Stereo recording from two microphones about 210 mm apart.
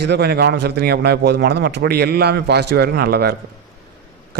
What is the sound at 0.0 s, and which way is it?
A man's voice, 50° right (ahead or behind).